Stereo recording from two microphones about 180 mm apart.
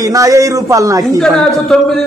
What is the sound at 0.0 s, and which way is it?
A man's voice, 20° right (ahead or behind).